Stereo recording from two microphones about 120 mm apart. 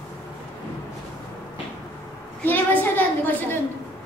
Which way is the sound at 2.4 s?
15° left (ahead or behind).